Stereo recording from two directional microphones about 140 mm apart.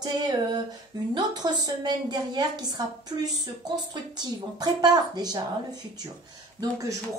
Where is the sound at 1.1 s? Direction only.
30° right (ahead or behind).